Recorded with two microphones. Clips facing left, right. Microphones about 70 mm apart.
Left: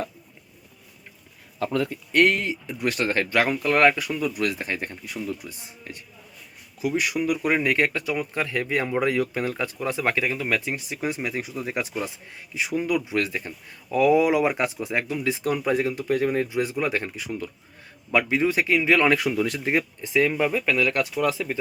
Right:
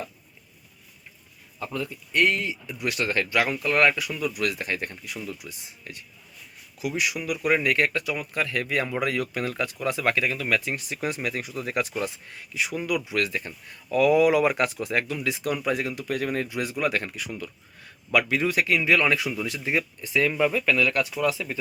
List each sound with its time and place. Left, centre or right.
1.5 s speech: left
2.1 s speech: left
19.7 s speech: left